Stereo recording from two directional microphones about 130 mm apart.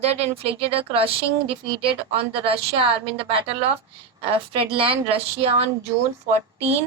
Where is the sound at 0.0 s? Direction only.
50° right (ahead or behind).